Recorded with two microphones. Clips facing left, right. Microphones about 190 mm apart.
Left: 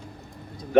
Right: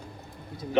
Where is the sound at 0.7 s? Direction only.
55° left (ahead or behind).